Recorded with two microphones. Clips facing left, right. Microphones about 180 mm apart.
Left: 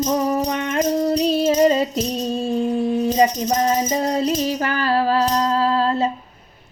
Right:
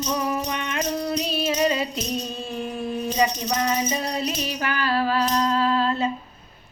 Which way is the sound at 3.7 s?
45° left (ahead or behind).